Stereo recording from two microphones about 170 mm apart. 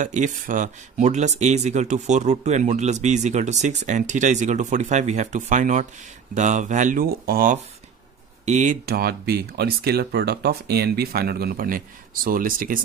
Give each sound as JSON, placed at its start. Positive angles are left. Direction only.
{"t": 0.0, "sound": "speech", "side_deg": -45}
{"t": 8.5, "sound": "speech", "side_deg": -45}
{"t": 8.8, "sound": "speech", "side_deg": -65}